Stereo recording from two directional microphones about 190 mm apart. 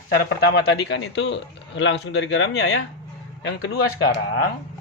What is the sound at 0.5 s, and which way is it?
A man's voice, 60° left (ahead or behind).